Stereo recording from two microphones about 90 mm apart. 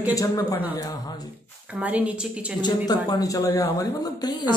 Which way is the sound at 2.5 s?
50° left (ahead or behind).